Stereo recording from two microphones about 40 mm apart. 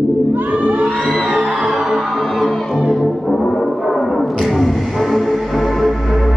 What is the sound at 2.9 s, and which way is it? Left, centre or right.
Brass instrument, centre.